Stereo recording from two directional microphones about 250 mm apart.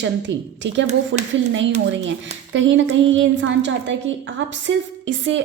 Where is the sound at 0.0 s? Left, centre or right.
Right.